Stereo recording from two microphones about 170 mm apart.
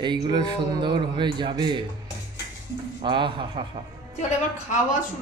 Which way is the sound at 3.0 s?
30° right (ahead or behind).